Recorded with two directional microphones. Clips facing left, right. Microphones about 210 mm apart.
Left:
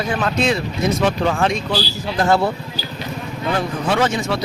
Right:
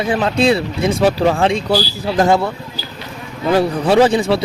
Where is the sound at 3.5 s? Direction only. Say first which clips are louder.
Right 8 dB; 35° right (ahead or behind).